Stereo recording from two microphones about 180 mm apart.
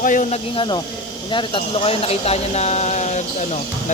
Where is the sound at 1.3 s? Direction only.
30° left (ahead or behind).